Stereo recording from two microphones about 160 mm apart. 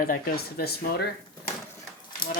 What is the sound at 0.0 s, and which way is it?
Speech, 65° left (ahead or behind).